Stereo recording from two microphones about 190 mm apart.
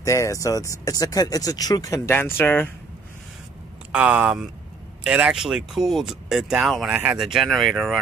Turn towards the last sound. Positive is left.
turn(degrees=0)  # may be behind; listen again after turning